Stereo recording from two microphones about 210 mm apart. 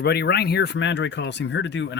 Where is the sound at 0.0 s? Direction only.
50° left (ahead or behind).